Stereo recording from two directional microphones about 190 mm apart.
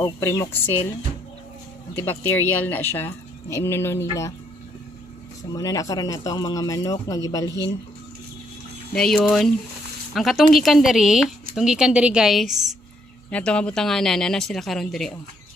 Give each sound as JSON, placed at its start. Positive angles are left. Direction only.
{"t": 0.0, "sound": "speech", "side_deg": 15}
{"t": 2.0, "sound": "speech", "side_deg": 10}
{"t": 5.5, "sound": "speech", "side_deg": 20}
{"t": 8.9, "sound": "speech", "side_deg": 5}